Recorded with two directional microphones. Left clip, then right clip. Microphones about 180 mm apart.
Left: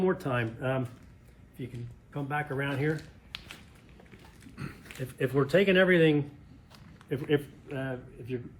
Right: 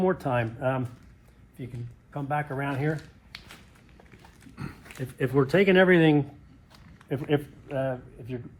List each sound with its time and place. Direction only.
0.0 s speech: 25° right (ahead or behind)
2.1 s speech: 15° right (ahead or behind)
4.9 s speech: 30° right (ahead or behind)
7.3 s speech: 25° right (ahead or behind)